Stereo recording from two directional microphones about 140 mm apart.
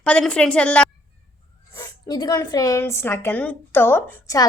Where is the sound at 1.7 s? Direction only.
25° left (ahead or behind).